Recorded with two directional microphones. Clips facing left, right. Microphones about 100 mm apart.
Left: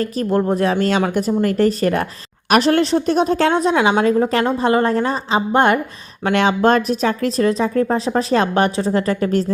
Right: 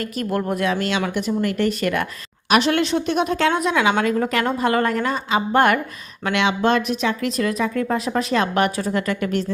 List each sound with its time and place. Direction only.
0.0 s a woman's voice: 30° left (ahead or behind)
6.2 s speech: 35° left (ahead or behind)